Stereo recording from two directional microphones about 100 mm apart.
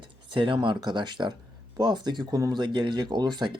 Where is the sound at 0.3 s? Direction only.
60° right (ahead or behind).